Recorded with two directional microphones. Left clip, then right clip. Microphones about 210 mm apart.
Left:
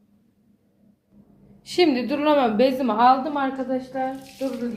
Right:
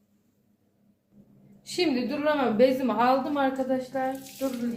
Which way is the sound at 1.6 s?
35° left (ahead or behind).